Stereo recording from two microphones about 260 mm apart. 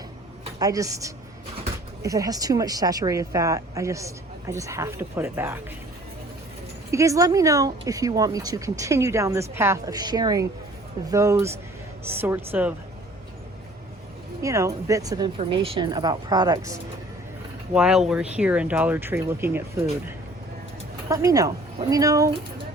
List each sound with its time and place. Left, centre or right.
0.6 s speech: centre
6.9 s speech: centre
14.4 s speech: centre
17.7 s speech: centre
21.1 s speech: centre